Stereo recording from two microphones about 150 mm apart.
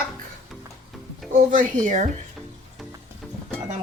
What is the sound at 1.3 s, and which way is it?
Speech, 60° right (ahead or behind).